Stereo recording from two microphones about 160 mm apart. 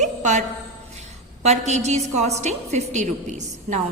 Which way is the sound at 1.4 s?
45° right (ahead or behind).